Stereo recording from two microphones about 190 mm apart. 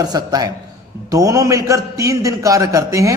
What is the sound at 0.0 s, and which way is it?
A man's voice, 20° right (ahead or behind).